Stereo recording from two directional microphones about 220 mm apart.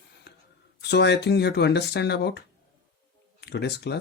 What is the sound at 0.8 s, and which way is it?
Speech, 50° left (ahead or behind).